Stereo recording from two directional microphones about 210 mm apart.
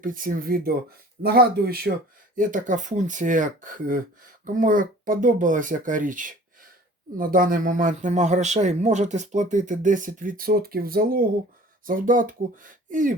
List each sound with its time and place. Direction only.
0.0 s speech: 40° right (ahead or behind)